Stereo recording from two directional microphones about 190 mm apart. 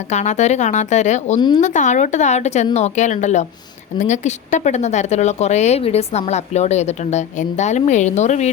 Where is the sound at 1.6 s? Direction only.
40° left (ahead or behind).